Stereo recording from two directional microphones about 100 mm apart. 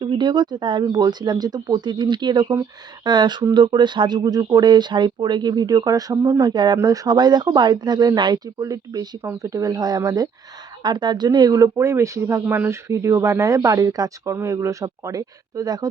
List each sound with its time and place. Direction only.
0.0 s speech: 50° right (ahead or behind)
10.8 s speech: 50° right (ahead or behind)